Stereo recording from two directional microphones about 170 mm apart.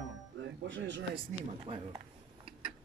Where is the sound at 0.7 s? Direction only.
90° right.